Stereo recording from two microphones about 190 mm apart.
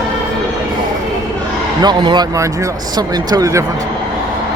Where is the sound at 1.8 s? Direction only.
25° right (ahead or behind).